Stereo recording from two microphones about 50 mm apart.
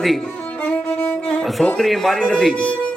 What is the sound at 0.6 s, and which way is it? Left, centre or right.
Music, left.